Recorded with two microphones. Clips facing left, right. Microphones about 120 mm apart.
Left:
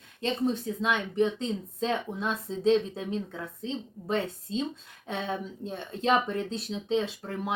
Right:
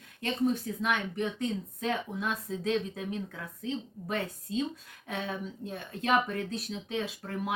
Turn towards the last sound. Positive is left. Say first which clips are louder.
# left 2 dB
turn(degrees=25)  # may be behind; listen again after turning